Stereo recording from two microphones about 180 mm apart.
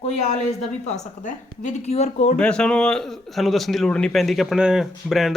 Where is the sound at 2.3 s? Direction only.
5° left (ahead or behind).